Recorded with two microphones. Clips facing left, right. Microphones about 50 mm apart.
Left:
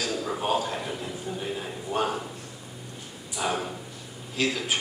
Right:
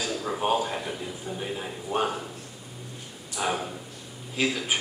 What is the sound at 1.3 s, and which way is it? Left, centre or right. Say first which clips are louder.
Speech: even; centre.